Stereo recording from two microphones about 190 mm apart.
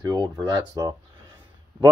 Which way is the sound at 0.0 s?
20° right (ahead or behind).